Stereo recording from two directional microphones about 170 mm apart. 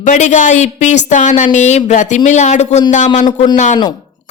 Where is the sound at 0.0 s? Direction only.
45° left (ahead or behind).